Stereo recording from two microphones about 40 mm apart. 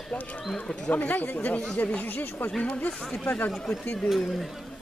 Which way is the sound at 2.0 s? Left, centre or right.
Left.